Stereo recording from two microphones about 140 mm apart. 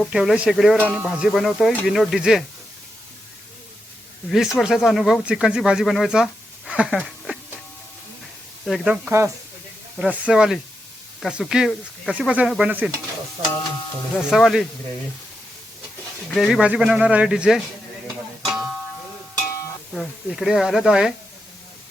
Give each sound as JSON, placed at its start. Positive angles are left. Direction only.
{"t": 0.1, "sound": "speech", "side_deg": -5}
{"t": 4.3, "sound": "speech", "side_deg": -5}
{"t": 6.7, "sound": "a sound", "side_deg": -5}
{"t": 8.6, "sound": "speech", "side_deg": 0}
{"t": 9.0, "sound": "speech", "side_deg": -20}
{"t": 10.0, "sound": "speech", "side_deg": -5}
{"t": 14.2, "sound": "speech", "side_deg": 0}
{"t": 16.3, "sound": "speech", "side_deg": 0}
{"t": 18.4, "sound": "music", "side_deg": 0}
{"t": 19.9, "sound": "speech", "side_deg": 0}